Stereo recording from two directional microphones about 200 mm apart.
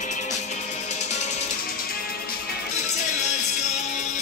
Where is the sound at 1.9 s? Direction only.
50° left (ahead or behind).